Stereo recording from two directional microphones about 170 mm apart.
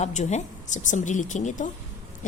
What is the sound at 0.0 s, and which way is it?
A woman's voice, 45° left (ahead or behind).